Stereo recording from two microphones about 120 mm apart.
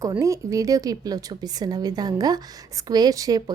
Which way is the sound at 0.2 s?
25° right (ahead or behind).